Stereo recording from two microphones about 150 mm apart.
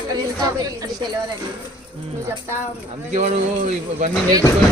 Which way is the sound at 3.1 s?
50° right (ahead or behind).